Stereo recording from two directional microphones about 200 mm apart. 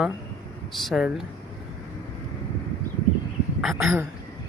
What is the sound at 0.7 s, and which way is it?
Speech, centre (ahead or behind).